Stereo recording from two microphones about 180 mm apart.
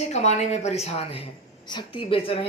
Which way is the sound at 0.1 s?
40° left (ahead or behind).